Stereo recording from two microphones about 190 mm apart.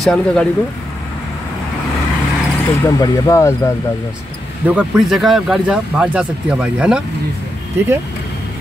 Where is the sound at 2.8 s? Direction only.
20° left (ahead or behind).